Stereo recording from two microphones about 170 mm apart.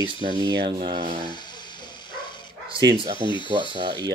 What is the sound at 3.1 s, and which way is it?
Speech, 30° left (ahead or behind).